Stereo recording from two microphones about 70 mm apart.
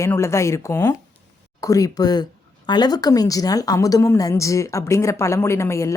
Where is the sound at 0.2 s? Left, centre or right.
Left.